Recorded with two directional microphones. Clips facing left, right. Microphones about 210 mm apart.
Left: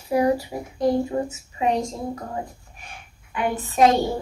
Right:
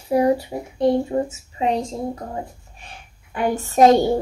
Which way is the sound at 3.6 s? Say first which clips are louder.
Right 3 dB; 40° right (ahead or behind).